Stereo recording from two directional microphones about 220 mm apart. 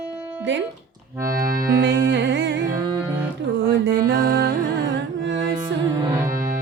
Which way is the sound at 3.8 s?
50° right (ahead or behind).